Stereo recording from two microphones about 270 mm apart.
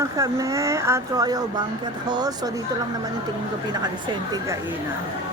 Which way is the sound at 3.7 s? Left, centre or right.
Centre.